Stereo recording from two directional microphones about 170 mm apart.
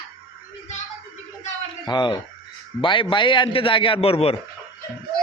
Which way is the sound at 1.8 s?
25° left (ahead or behind).